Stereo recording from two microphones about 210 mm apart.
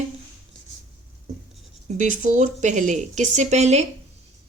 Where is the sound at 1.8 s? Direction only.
35° right (ahead or behind).